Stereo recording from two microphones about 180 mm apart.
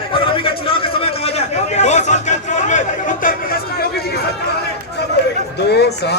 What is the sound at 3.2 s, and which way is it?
Chatter, 55° left (ahead or behind).